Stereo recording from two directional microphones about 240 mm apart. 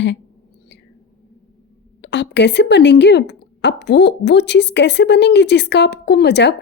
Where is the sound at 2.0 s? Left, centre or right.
Left.